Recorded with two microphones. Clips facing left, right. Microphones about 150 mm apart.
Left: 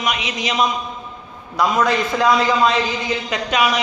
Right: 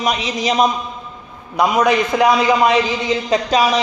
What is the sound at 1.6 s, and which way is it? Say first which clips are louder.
A man's voice: right 3 dB; 20° right (ahead or behind).